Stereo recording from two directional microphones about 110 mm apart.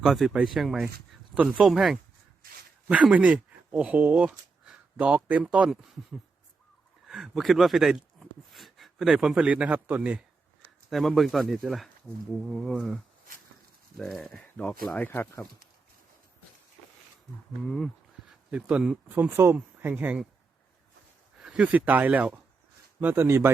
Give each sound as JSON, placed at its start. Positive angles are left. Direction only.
{"t": 0.0, "sound": "speech", "side_deg": -5}
{"t": 7.1, "sound": "speech", "side_deg": 0}
{"t": 10.8, "sound": "speech", "side_deg": 0}
{"t": 17.6, "sound": "a sound", "side_deg": 0}
{"t": 18.5, "sound": "speech", "side_deg": -10}
{"t": 21.4, "sound": "speech", "side_deg": -10}